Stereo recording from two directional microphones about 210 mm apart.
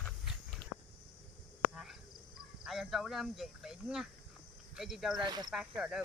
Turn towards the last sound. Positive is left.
turn(degrees=0)  # may be behind; listen again after turning